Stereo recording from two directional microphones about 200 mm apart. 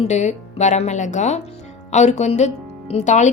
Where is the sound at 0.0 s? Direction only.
35° left (ahead or behind).